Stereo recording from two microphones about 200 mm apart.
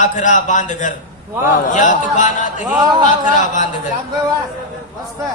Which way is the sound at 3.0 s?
40° left (ahead or behind).